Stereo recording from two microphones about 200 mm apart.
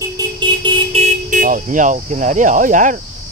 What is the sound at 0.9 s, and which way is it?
Speech, 35° right (ahead or behind).